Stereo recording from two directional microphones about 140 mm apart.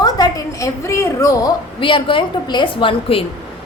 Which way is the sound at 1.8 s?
35° left (ahead or behind).